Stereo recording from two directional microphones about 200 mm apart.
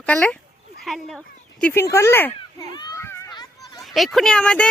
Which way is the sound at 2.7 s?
20° left (ahead or behind).